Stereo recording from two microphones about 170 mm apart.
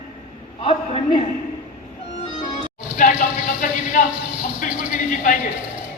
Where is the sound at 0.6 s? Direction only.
35° left (ahead or behind).